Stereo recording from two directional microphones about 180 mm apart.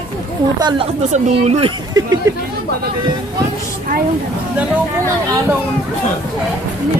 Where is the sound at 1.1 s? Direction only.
40° right (ahead or behind).